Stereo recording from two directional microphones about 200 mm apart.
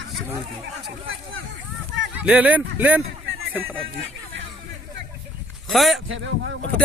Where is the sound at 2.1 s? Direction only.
5° right (ahead or behind).